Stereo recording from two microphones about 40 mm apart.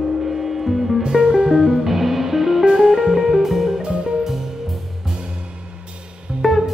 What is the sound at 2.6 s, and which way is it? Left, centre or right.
Music, centre.